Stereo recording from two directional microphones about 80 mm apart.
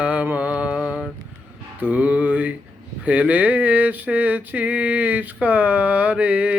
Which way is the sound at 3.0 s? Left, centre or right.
Centre.